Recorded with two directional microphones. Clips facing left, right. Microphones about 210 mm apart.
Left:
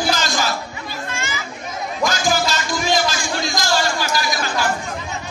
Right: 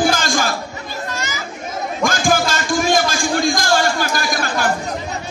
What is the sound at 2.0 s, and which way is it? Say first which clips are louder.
Music: right 2 dB; 50° right (ahead or behind).